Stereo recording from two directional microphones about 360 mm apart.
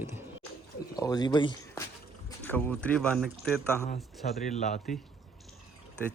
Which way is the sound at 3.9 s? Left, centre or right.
Left.